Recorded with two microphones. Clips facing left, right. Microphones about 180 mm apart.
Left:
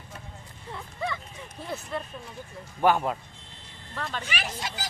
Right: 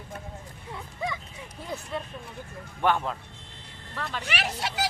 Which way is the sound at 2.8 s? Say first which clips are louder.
Left 3 dB; 5° left (ahead or behind).